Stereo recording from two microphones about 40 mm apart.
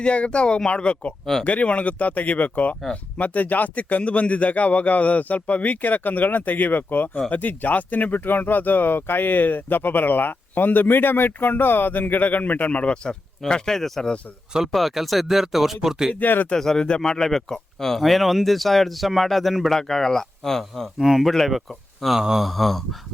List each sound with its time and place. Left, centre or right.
0.0 s speech: left
1.2 s speech: centre
1.5 s speech: left
12.9 s speech: left
13.5 s speech: centre
16.1 s speech: left
16.6 s speech: centre
21.0 s speech: centre
21.2 s speech: centre
22.4 s speech: centre